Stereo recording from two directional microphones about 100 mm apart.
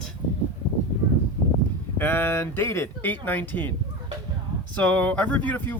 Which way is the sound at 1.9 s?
20° left (ahead or behind).